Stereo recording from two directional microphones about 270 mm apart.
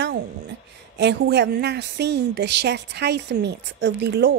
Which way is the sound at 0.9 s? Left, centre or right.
Right.